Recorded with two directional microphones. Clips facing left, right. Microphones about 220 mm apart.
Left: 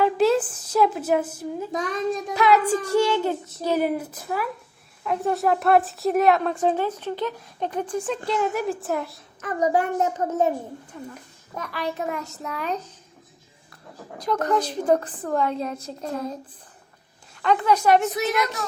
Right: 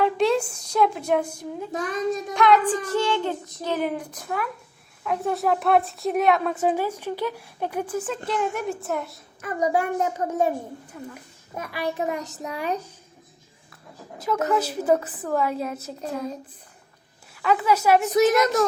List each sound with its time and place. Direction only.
0.0 s a woman's voice: 5° left (ahead or behind)
9.7 s a woman's voice: 10° right (ahead or behind)
14.2 s a woman's voice: 5° right (ahead or behind)
18.1 s a woman's voice: 40° right (ahead or behind)